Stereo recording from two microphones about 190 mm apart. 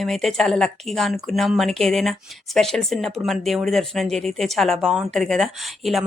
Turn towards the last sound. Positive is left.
turn(degrees=0)  # may be behind; listen again after turning